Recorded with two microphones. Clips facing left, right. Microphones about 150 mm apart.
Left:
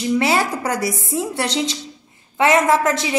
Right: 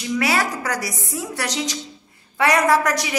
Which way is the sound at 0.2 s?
25° left (ahead or behind).